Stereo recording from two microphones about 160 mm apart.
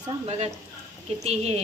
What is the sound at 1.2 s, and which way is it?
Speech, 40° right (ahead or behind).